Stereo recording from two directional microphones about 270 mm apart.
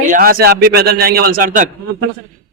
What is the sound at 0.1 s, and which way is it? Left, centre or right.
A man's voice, right.